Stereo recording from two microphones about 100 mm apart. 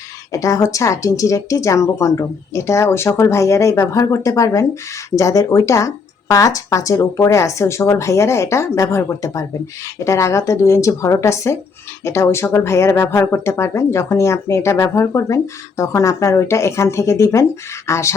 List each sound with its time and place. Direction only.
0.3 s speech: 35° left (ahead or behind)